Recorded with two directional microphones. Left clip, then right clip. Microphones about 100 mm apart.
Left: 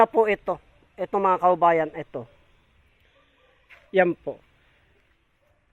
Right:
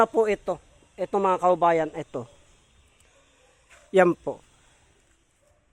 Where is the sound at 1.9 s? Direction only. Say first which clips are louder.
Even; 35° right (ahead or behind).